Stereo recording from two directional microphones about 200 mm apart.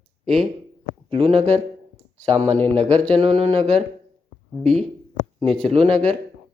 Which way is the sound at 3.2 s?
30° right (ahead or behind).